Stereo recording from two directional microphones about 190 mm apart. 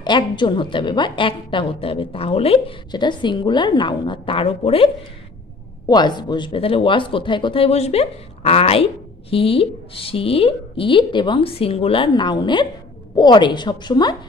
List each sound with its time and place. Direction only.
0.0 s a woman's voice: 25° left (ahead or behind)